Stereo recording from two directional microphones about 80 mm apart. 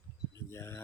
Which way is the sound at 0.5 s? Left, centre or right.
Left.